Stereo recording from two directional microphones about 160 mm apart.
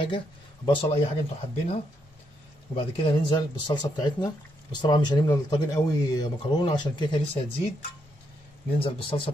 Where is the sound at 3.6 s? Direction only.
25° left (ahead or behind).